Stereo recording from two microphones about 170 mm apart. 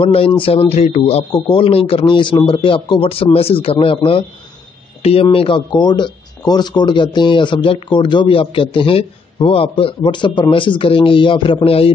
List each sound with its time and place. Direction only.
0.0 s speech: 35° left (ahead or behind)